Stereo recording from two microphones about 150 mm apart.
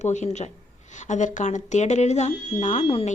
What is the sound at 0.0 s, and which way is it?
Speech, 50° left (ahead or behind).